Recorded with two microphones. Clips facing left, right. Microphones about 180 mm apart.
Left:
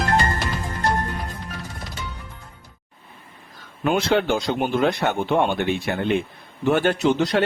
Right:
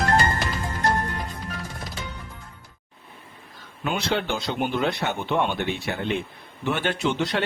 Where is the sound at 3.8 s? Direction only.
50° left (ahead or behind).